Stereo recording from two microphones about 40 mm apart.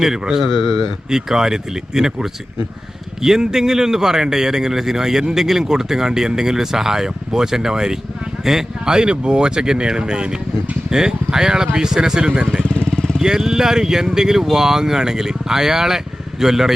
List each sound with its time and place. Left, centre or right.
0.0 s a man's voice: centre
0.4 s speech: centre
1.1 s a man's voice: centre
12.8 s vehicle: centre
13.2 s a man's voice: centre